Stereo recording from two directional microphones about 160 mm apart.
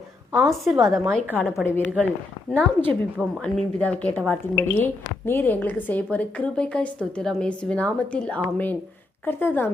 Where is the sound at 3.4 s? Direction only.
10° left (ahead or behind).